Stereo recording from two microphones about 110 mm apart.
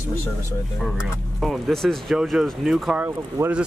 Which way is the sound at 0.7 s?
Centre (ahead or behind).